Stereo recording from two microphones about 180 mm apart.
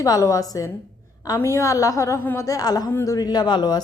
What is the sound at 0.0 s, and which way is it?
A woman's voice, 15° left (ahead or behind).